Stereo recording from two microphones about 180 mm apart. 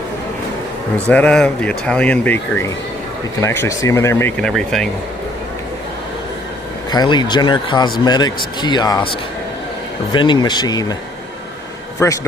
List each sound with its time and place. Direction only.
0.9 s speech: 5° left (ahead or behind)
6.9 s speech: 25° left (ahead or behind)
10.1 s speech: 25° left (ahead or behind)
11.9 s a man's voice: 15° left (ahead or behind)